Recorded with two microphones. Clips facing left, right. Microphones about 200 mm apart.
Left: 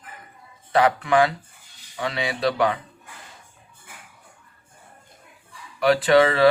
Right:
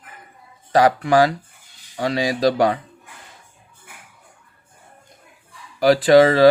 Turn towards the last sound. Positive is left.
turn(degrees=-35)  # may be behind; listen again after turning